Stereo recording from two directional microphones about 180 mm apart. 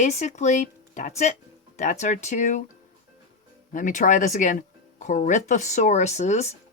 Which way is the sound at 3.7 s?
45° left (ahead or behind).